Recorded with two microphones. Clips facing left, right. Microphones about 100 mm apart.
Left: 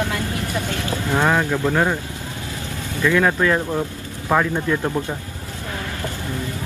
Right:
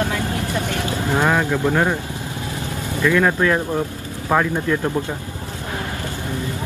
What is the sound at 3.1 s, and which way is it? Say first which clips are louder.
Speech: even; centre (ahead or behind).